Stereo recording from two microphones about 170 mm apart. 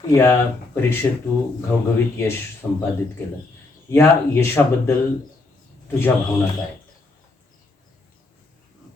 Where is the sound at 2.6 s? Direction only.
10° left (ahead or behind).